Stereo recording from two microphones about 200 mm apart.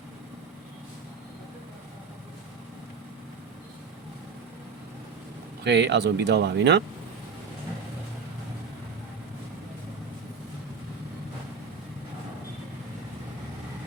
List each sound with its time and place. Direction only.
5.6 s speech: 60° right (ahead or behind)